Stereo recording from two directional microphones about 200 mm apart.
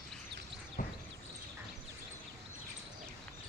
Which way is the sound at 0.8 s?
40° left (ahead or behind).